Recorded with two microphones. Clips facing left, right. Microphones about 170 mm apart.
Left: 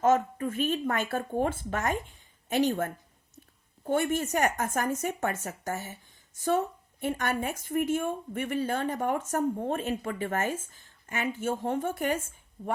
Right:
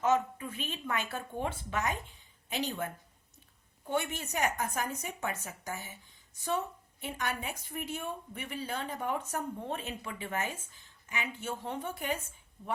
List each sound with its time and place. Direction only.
0.0 s a woman's voice: 50° left (ahead or behind)
12.6 s speech: 40° left (ahead or behind)